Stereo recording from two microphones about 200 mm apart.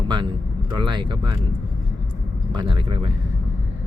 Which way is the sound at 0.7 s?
20° right (ahead or behind).